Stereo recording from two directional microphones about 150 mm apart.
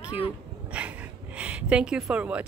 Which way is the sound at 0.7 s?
10° right (ahead or behind).